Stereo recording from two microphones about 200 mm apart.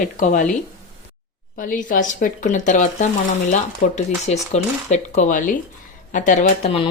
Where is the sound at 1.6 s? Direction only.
40° left (ahead or behind).